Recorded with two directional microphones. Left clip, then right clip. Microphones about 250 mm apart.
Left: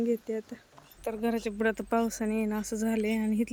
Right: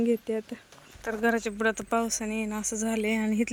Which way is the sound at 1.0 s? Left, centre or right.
Centre.